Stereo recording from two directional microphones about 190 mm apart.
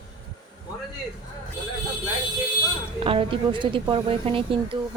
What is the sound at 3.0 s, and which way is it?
A woman's voice, 30° right (ahead or behind).